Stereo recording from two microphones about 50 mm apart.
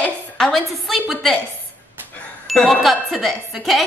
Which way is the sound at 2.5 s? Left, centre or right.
Centre.